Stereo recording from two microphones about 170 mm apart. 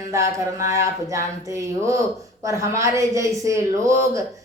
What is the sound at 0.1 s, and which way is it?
A woman's voice, 20° right (ahead or behind).